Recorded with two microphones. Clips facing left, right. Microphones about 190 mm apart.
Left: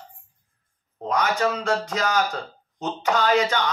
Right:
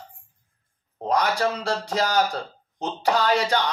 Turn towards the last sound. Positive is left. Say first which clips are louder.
# left 1 dB
turn(degrees=-35)  # may be behind; listen again after turning